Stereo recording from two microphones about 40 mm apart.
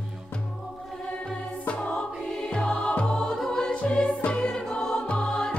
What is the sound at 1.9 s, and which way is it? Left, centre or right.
Music, centre.